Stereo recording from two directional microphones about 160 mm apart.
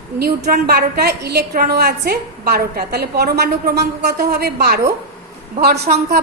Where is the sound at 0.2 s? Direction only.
75° right (ahead or behind); by 5.8 s 90° right.